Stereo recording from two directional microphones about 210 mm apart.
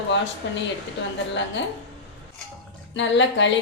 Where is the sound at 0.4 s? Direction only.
60° left (ahead or behind).